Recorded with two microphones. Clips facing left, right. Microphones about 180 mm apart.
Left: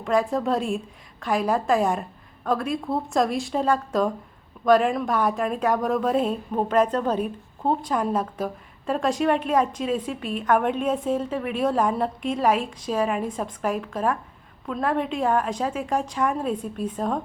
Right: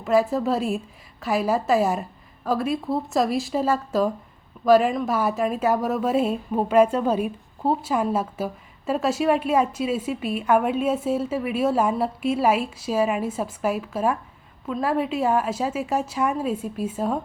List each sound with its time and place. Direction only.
0.0 s a woman's voice: 5° right (ahead or behind)